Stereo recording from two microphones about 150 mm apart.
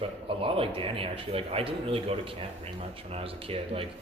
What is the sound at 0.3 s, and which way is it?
Speech, 35° right (ahead or behind).